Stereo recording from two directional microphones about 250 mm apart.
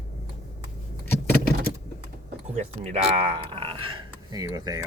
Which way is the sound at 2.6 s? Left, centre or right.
Right.